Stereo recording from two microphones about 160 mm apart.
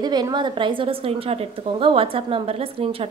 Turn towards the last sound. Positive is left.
turn(degrees=-35)  # may be behind; listen again after turning